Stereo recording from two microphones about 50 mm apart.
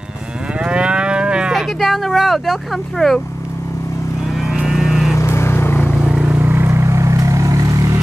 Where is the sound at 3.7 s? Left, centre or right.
Left.